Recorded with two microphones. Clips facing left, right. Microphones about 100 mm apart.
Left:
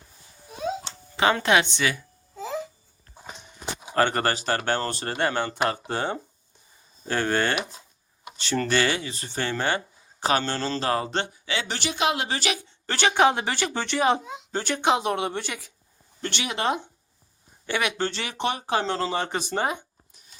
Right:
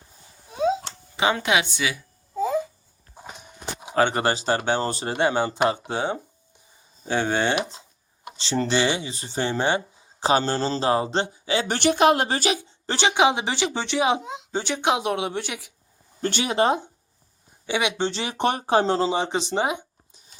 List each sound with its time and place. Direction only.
1.1 s speech: 10° right (ahead or behind)
3.3 s speech: 5° right (ahead or behind); by 11.6 s 30° right (ahead or behind)
11.7 s a woman's voice: 50° right (ahead or behind)
12.8 s a woman's voice: 20° right (ahead or behind)
16.2 s speech: 35° right (ahead or behind)
17.7 s speech: 15° right (ahead or behind)
18.3 s a woman's voice: 45° right (ahead or behind)
18.7 s speech: 30° right (ahead or behind)
19.1 s speech: 15° right (ahead or behind)